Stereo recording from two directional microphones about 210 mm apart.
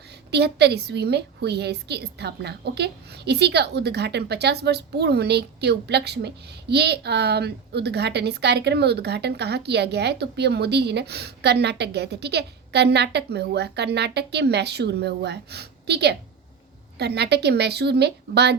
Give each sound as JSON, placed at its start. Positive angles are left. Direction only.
{"t": 0.3, "sound": "a woman's voice", "side_deg": -50}